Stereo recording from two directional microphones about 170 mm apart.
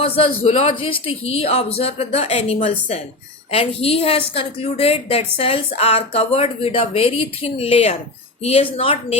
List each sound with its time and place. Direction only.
0.0 s a woman's voice: 35° left (ahead or behind)